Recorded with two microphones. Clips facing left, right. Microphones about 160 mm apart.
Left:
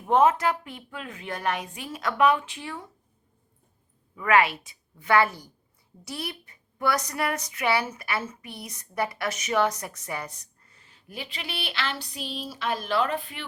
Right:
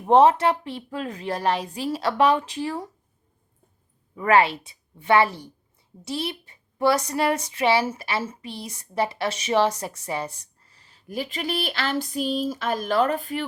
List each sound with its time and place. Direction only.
0.0 s a woman's voice: 30° right (ahead or behind)
4.1 s speech: 35° right (ahead or behind)